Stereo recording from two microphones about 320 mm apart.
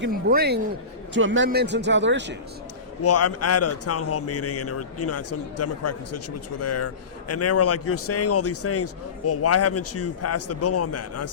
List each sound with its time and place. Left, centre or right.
0.0 s a man's voice: right
3.0 s a man's voice: left